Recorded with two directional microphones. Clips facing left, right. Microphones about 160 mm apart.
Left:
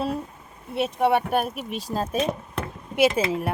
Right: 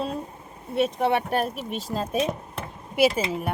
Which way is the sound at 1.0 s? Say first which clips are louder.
Left 6 dB; 5° left (ahead or behind).